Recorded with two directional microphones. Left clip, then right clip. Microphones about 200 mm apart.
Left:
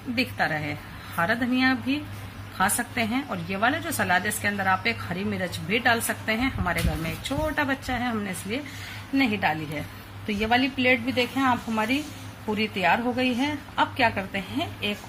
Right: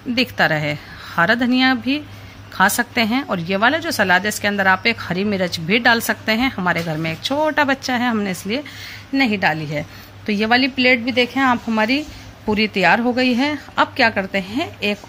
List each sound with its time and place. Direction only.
0.1 s a woman's voice: 50° right (ahead or behind)